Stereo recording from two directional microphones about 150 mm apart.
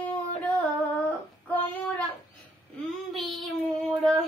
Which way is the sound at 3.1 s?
Centre (ahead or behind).